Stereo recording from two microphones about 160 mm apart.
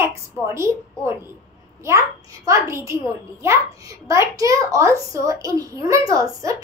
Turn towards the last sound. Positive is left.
turn(degrees=-20)  # may be behind; listen again after turning